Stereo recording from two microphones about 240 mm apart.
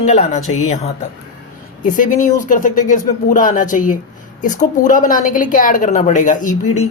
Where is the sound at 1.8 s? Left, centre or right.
Left.